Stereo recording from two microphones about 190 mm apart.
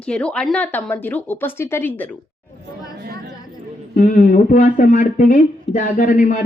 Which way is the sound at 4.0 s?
45° left (ahead or behind).